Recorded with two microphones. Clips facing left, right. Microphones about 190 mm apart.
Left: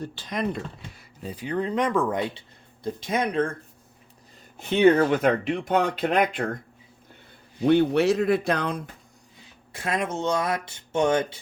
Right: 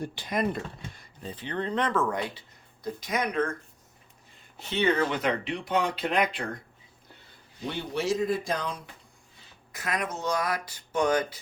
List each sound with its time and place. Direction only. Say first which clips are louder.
0.0 s speech: even; 15° right (ahead or behind)
0.3 s speech: even; centre (ahead or behind)
1.2 s speech: left 5 dB; 10° left (ahead or behind); by 3.5 s 30° left (ahead or behind)
4.5 s speech: left 8 dB; 50° left (ahead or behind)
7.6 s speech: left 12 dB; 60° left (ahead or behind)
9.7 s speech: left 5 dB; 30° left (ahead or behind)